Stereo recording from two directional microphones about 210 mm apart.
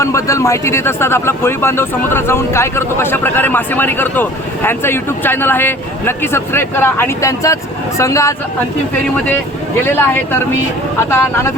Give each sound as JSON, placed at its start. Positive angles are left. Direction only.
{"t": 0.0, "sound": "speech", "side_deg": 15}
{"t": 9.8, "sound": "speech", "side_deg": 10}